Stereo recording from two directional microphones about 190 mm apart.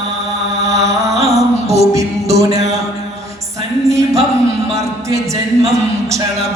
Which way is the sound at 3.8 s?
15° right (ahead or behind).